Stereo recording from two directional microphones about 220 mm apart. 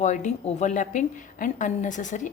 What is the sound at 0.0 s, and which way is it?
A woman's voice, 35° left (ahead or behind).